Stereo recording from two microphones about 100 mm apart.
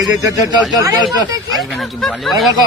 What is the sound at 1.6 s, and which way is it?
Speech, 5° left (ahead or behind).